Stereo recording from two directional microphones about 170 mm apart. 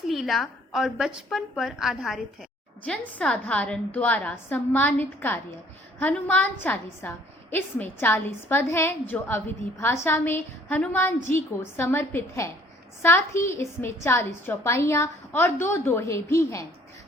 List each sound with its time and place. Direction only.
0.1 s a woman's voice: centre (ahead or behind); by 16.6 s 15° left (ahead or behind)